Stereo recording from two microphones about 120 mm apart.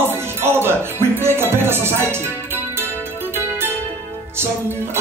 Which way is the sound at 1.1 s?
20° right (ahead or behind).